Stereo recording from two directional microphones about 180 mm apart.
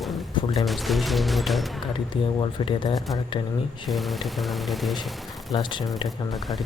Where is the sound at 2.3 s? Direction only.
25° left (ahead or behind).